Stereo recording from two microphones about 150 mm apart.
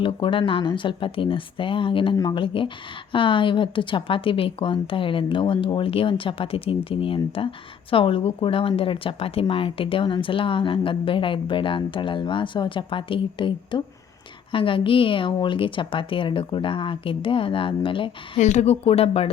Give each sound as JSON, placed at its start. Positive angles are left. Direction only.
{"t": 0.0, "sound": "speech", "side_deg": 35}
{"t": 18.3, "sound": "a woman's voice", "side_deg": 50}